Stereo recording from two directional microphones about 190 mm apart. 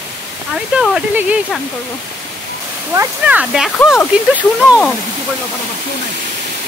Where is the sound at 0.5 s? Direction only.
5° right (ahead or behind).